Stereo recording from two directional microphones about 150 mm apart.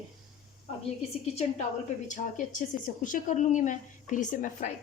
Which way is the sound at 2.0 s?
55° left (ahead or behind).